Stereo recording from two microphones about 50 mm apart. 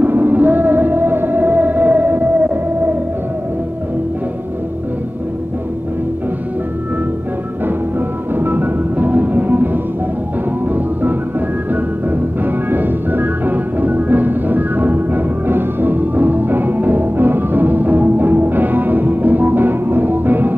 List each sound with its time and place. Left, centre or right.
0.0 s music: right
8.4 s music: right